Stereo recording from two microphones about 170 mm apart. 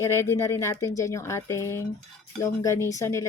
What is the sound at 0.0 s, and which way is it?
Speech, 15° left (ahead or behind).